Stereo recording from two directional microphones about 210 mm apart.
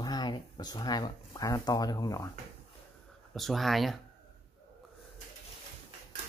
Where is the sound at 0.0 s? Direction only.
20° left (ahead or behind).